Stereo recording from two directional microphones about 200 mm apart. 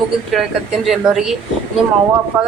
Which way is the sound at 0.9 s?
Centre (ahead or behind).